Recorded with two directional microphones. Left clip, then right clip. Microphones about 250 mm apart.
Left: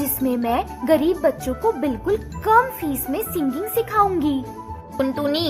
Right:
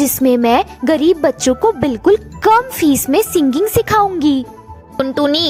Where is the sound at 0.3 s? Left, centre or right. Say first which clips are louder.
Right 10 dB; right.